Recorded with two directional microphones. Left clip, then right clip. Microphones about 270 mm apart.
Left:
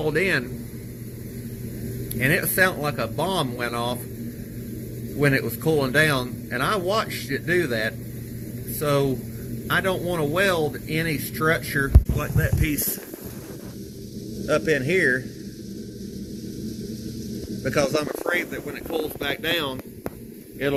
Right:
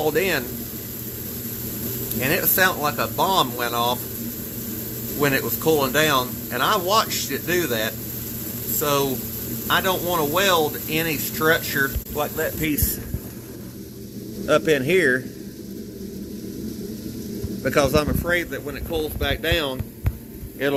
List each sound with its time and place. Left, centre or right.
0.0 s speech: centre
2.2 s speech: centre
5.2 s speech: centre
12.1 s speech: centre
14.4 s speech: right
17.6 s a man's voice: right; by 20.8 s centre